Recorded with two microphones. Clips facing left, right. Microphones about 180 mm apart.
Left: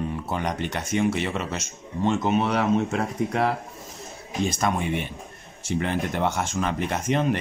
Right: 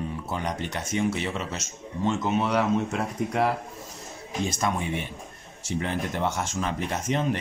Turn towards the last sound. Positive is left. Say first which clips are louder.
# left 3 dB
turn(degrees=65)  # may be behind; listen again after turning